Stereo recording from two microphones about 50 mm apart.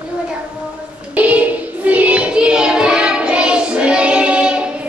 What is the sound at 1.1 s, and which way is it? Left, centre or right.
Child singing, right.